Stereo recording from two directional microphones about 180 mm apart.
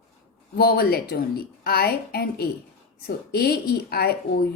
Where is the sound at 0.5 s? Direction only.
60° left (ahead or behind).